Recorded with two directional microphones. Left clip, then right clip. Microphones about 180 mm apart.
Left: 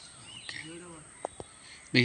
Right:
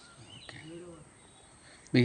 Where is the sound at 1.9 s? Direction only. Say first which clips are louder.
Left 2 dB; 55° right (ahead or behind).